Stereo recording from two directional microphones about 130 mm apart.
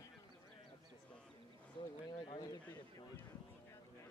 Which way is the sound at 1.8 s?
35° left (ahead or behind).